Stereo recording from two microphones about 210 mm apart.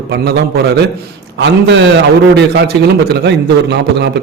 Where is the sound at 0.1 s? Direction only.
50° right (ahead or behind).